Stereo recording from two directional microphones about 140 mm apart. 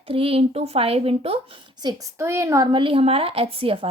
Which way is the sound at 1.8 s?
25° right (ahead or behind).